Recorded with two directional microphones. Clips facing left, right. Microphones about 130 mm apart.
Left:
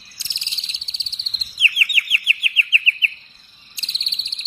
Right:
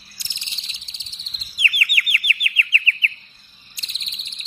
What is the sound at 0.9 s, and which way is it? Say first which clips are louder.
Bird vocalization: left 4 dB; 25° left (ahead or behind).